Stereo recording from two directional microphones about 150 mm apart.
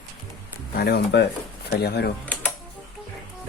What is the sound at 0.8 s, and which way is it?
Speech, 90° left.